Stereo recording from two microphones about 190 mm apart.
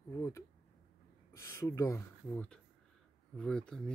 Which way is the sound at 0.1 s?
15° left (ahead or behind).